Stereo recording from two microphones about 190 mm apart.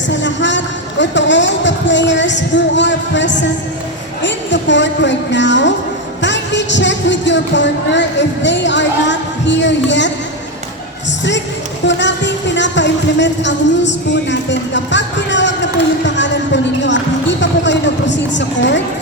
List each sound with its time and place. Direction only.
0.1 s speech: 70° left (ahead or behind)
11.9 s speech: 70° left (ahead or behind)